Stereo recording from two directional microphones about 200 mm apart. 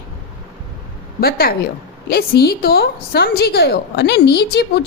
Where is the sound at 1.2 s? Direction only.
50° left (ahead or behind).